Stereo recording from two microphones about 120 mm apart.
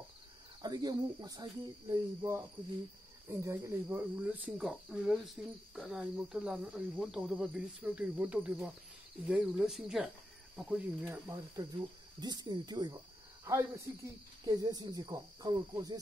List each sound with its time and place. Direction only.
0.6 s speech: 30° right (ahead or behind); by 11.1 s 5° right (ahead or behind)
11.1 s speech: 25° right (ahead or behind)
12.2 s speech: 35° right (ahead or behind)
13.5 s speech: 25° right (ahead or behind)